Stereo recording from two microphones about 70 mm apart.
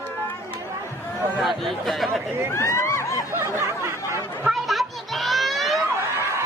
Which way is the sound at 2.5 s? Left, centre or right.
Left.